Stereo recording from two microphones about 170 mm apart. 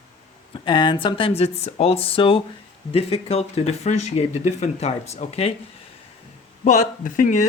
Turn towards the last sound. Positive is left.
turn(degrees=50)  # may be behind; listen again after turning